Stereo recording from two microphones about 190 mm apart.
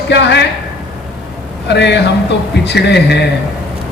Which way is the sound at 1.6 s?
65° left (ahead or behind).